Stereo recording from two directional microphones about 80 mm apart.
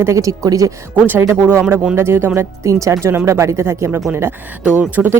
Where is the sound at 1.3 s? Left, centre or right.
Right.